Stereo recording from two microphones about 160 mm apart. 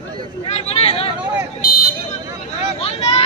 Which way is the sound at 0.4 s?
40° left (ahead or behind).